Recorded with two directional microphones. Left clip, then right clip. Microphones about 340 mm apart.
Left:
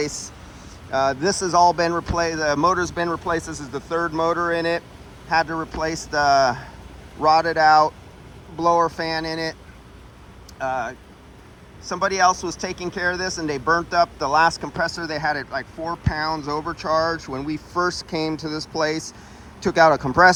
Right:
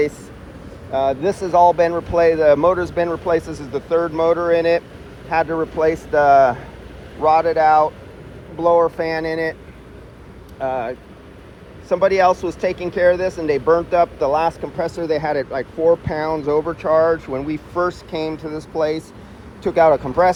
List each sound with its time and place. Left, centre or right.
0.9 s speech: centre
10.6 s speech: centre